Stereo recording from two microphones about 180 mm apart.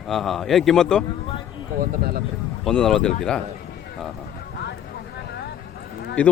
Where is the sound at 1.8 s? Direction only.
55° right (ahead or behind).